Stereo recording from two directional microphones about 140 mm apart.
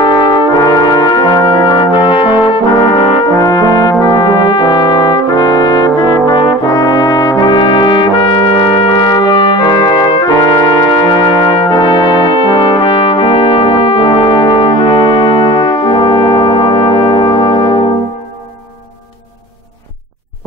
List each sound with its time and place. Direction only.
0.0 s brass instrument: 35° left (ahead or behind)